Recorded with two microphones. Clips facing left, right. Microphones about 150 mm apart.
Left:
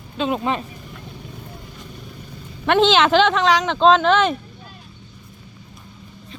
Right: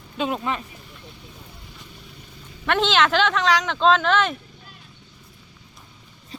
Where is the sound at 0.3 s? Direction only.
25° left (ahead or behind).